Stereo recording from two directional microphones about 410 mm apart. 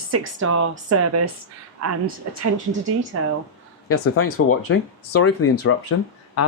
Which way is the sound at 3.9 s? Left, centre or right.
Left.